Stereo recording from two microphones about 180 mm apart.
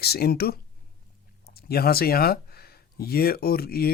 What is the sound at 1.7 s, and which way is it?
Speech, 60° left (ahead or behind).